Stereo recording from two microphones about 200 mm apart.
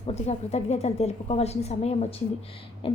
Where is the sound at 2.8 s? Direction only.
30° left (ahead or behind).